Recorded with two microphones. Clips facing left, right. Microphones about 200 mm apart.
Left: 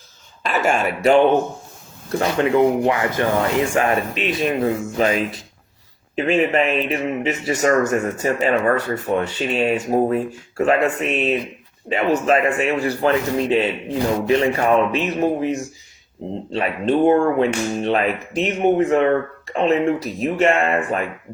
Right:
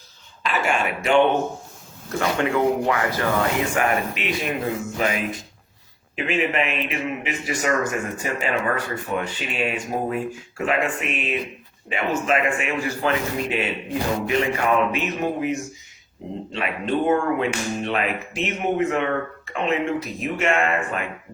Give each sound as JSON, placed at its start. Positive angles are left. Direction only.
{"t": 0.4, "sound": "speech", "side_deg": 45}
{"t": 2.1, "sound": "speech", "side_deg": 25}
{"t": 6.1, "sound": "speech", "side_deg": 40}